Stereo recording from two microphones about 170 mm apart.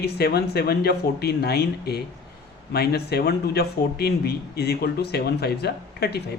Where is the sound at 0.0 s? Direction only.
70° left (ahead or behind).